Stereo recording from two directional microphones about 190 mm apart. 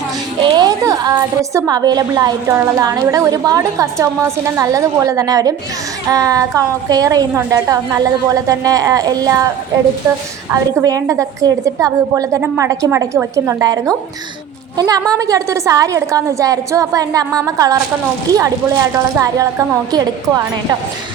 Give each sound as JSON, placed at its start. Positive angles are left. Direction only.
{"t": 0.5, "sound": "a woman's voice", "side_deg": -20}
{"t": 10.5, "sound": "a woman's voice", "side_deg": -20}